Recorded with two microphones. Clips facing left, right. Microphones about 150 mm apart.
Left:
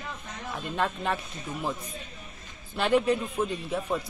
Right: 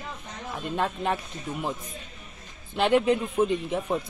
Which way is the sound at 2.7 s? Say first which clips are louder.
Right 2 dB; 15° right (ahead or behind).